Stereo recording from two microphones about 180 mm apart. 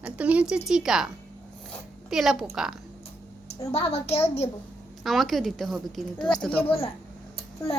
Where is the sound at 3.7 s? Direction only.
35° left (ahead or behind).